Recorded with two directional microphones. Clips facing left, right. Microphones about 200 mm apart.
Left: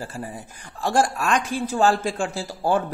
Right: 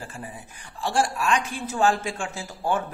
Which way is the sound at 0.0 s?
40° left (ahead or behind).